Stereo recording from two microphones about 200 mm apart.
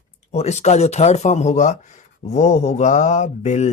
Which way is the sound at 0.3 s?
35° left (ahead or behind).